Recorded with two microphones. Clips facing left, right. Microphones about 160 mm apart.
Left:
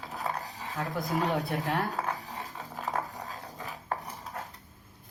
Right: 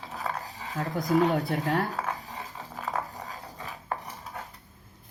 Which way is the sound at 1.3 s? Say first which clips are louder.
Right 3 dB; centre (ahead or behind).